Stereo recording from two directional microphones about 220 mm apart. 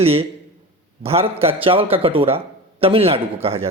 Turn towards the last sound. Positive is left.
turn(degrees=-25)  # may be behind; listen again after turning